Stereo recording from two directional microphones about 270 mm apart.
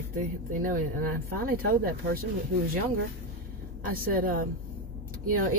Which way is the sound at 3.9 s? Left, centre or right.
Right.